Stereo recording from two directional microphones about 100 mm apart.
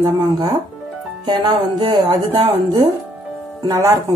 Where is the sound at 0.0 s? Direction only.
40° right (ahead or behind).